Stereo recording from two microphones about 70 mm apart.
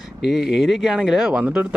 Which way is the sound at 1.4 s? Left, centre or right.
Right.